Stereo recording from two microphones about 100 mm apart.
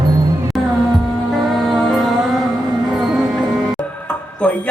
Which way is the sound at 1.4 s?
Centre (ahead or behind).